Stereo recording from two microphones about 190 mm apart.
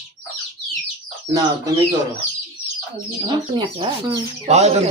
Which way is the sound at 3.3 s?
25° right (ahead or behind).